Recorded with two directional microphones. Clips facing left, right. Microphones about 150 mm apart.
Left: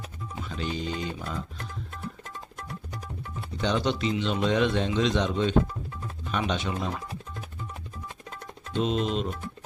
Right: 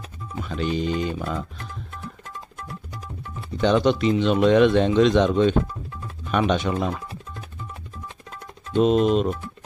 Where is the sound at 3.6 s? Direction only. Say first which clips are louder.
Right 8 dB; 60° right (ahead or behind).